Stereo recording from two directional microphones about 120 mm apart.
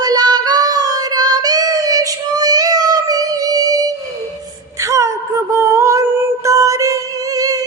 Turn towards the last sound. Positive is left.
turn(degrees=-30)  # may be behind; listen again after turning